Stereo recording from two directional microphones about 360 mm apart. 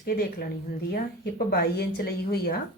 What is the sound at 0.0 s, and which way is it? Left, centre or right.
Speech, left.